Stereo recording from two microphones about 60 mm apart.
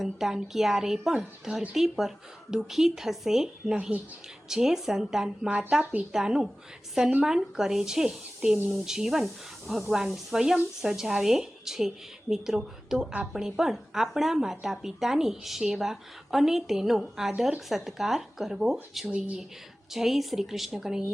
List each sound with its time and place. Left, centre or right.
0.0 s speech: centre